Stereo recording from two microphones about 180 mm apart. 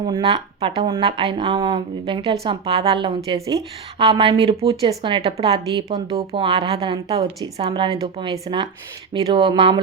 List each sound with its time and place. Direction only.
0.0 s a woman's voice: 25° right (ahead or behind)
4.0 s a woman's voice: 30° right (ahead or behind)